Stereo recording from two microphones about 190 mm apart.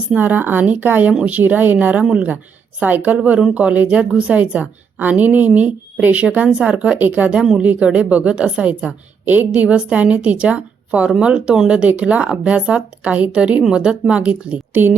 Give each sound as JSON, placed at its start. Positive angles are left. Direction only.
{"t": 0.1, "sound": "a woman's voice", "side_deg": -10}